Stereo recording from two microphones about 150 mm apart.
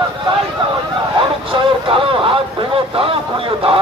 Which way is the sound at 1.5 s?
35° right (ahead or behind).